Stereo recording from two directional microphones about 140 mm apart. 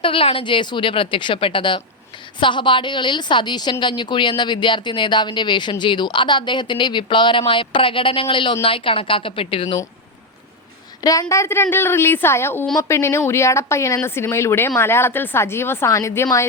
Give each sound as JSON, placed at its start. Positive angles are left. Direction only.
{"t": 0.0, "sound": "a woman's voice", "side_deg": 40}
{"t": 11.0, "sound": "speech", "side_deg": 25}